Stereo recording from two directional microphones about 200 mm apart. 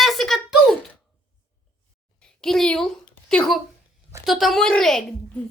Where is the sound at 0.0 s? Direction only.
Centre (ahead or behind).